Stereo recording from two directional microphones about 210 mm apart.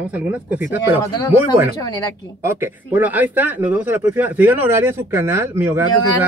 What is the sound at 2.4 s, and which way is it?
Speech, 10° right (ahead or behind).